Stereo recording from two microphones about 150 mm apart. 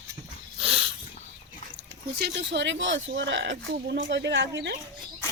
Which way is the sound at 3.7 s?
90° right.